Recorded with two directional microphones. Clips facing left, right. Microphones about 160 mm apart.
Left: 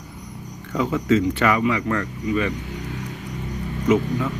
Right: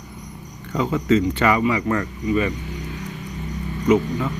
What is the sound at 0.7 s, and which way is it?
Speech, centre (ahead or behind).